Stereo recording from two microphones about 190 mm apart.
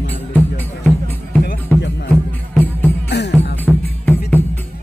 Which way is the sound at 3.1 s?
65° left (ahead or behind).